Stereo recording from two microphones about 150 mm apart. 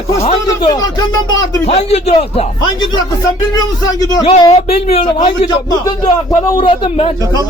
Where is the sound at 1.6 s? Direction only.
45° left (ahead or behind); by 4.3 s 25° left (ahead or behind).